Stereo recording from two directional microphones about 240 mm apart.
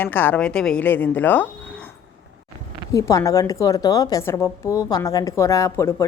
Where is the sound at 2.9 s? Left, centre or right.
Centre.